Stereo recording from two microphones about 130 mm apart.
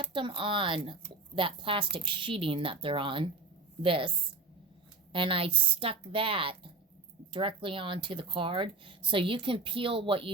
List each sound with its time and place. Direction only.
0.1 s a woman's voice: 40° right (ahead or behind)
5.1 s a woman's voice: 40° right (ahead or behind)